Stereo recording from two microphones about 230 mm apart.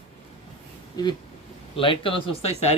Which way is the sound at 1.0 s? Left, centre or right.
Centre.